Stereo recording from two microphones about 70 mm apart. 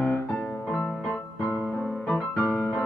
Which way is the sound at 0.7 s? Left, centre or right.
Centre.